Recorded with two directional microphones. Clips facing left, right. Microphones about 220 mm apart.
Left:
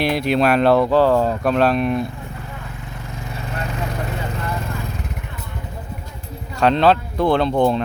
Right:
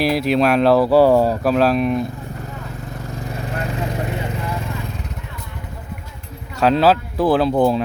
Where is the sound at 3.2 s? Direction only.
35° right (ahead or behind).